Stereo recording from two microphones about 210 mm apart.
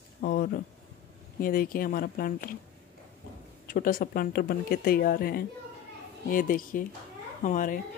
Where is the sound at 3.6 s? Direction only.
40° left (ahead or behind).